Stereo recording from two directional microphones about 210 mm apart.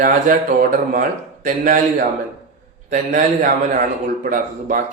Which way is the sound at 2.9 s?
35° right (ahead or behind).